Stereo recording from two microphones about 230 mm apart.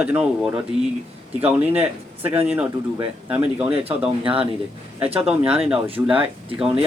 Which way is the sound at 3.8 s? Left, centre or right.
Right.